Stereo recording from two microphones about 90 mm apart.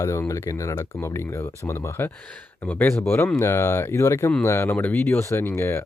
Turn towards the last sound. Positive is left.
turn(degrees=30)  # may be behind; listen again after turning